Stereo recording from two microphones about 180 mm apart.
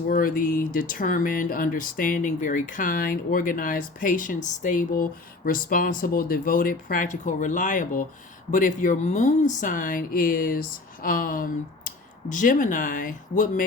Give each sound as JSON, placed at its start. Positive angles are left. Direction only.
{"t": 0.1, "sound": "speech", "side_deg": 50}